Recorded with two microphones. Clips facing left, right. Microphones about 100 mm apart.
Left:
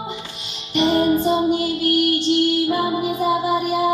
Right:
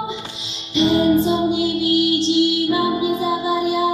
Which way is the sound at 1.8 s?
55° left (ahead or behind).